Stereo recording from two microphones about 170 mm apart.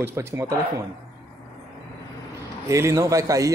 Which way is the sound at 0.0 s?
15° right (ahead or behind).